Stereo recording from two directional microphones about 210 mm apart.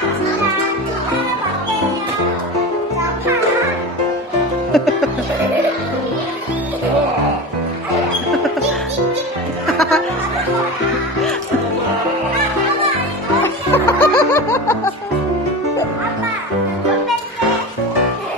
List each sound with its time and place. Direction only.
4.7 s music: centre (ahead or behind)
13.4 s music: 10° left (ahead or behind)